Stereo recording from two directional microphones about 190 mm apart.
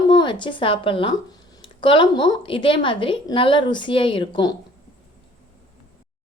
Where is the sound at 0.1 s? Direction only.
25° left (ahead or behind).